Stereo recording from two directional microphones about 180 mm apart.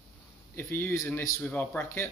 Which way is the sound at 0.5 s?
15° left (ahead or behind).